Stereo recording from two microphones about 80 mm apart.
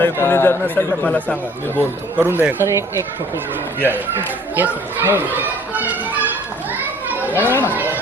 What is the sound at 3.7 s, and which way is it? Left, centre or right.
Speech, right.